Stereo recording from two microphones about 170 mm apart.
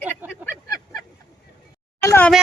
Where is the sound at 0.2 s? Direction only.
10° right (ahead or behind).